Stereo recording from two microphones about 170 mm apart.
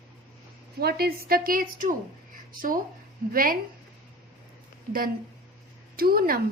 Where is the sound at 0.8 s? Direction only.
70° right (ahead or behind).